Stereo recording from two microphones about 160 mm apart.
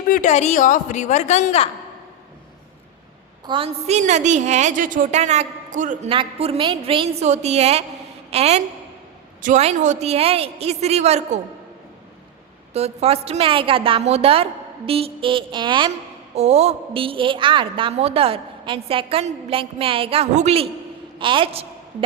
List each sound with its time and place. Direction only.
0.1 s a woman's voice: 50° left (ahead or behind)
3.4 s a woman's voice: 35° right (ahead or behind); by 6.1 s 50° right (ahead or behind)
6.1 s a woman's voice: 35° right (ahead or behind)
12.7 s a woman's voice: 40° right (ahead or behind)
16.3 s a woman's voice: 40° right (ahead or behind)
21.2 s a woman's voice: 30° right (ahead or behind)